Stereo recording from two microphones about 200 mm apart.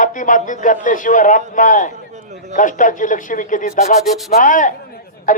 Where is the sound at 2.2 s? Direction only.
35° right (ahead or behind).